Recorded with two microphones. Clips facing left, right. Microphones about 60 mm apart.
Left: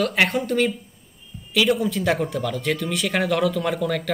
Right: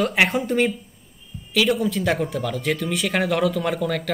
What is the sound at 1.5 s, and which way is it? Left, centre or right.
Speech, centre.